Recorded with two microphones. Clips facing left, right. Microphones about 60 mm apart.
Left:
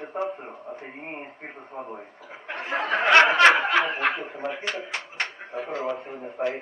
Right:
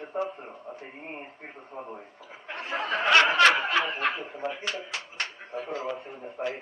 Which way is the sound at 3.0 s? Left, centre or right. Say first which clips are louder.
Left 3 dB; left.